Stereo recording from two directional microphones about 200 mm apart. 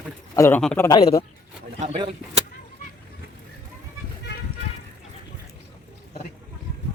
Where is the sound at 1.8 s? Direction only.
25° right (ahead or behind).